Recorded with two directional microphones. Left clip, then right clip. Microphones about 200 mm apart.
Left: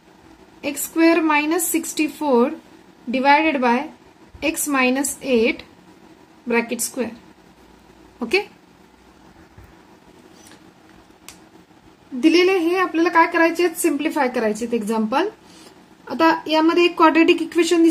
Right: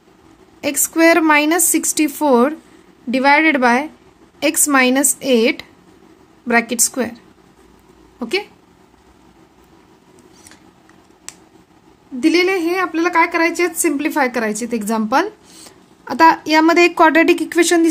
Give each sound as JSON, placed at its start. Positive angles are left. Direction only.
{"t": 0.6, "sound": "a woman's voice", "side_deg": -45}
{"t": 8.2, "sound": "speech", "side_deg": -25}
{"t": 12.2, "sound": "a woman's voice", "side_deg": -25}